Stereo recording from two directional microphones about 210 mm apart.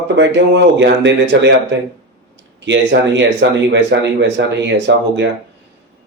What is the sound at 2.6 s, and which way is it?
A man's voice, 55° right (ahead or behind).